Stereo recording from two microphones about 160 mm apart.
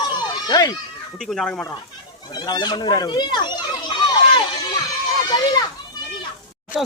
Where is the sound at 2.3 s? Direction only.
25° left (ahead or behind).